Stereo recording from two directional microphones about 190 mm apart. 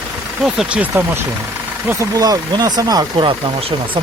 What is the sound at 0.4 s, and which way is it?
Speech, 5° right (ahead or behind).